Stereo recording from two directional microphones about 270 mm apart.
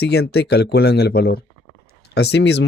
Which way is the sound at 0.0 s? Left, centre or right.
Left.